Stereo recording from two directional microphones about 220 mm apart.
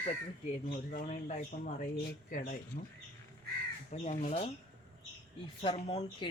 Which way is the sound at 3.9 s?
30° left (ahead or behind).